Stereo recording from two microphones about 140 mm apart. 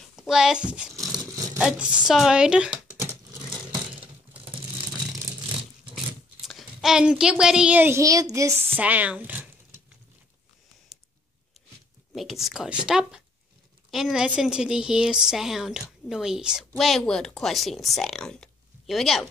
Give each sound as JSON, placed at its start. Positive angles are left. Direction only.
{"t": 0.1, "sound": "a child's voice", "side_deg": -5}
{"t": 1.0, "sound": "a sound", "side_deg": -25}
{"t": 1.6, "sound": "a woman's voice", "side_deg": -5}
{"t": 6.4, "sound": "a child's voice", "side_deg": 0}
{"t": 12.1, "sound": "a woman's voice", "side_deg": 0}